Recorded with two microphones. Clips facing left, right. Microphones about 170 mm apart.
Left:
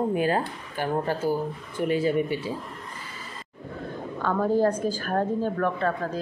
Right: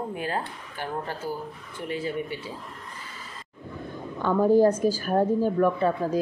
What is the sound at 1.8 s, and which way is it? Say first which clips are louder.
Speech: left 7 dB; 5° left (ahead or behind).